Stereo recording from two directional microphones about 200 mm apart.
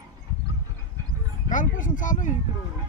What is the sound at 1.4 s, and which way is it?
Speech, 40° left (ahead or behind).